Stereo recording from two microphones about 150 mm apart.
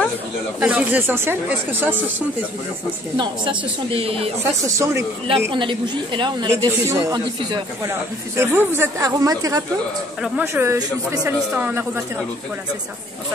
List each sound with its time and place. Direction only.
0.6 s speech: 10° right (ahead or behind)
3.2 s a woman's voice: 35° right (ahead or behind)
4.6 s speech: 20° right (ahead or behind)
5.5 s a woman's voice: 35° right (ahead or behind)
8.4 s speech: 15° right (ahead or behind)